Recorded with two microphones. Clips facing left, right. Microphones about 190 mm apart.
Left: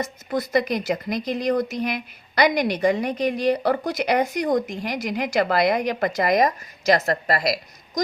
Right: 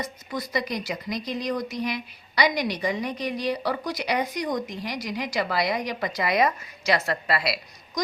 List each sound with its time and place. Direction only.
0.3 s speech: 55° left (ahead or behind)